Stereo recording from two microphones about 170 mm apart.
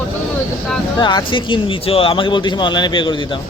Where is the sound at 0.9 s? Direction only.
25° left (ahead or behind).